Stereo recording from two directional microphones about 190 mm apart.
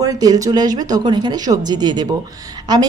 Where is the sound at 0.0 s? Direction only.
20° right (ahead or behind).